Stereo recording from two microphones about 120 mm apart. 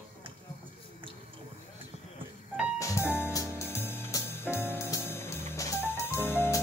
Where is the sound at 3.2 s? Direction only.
25° left (ahead or behind).